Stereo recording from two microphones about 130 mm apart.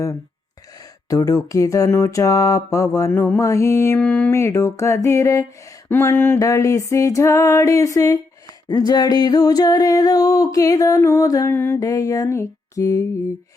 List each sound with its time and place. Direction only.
1.1 s mantra: 25° left (ahead or behind)
11.5 s mantra: 15° left (ahead or behind)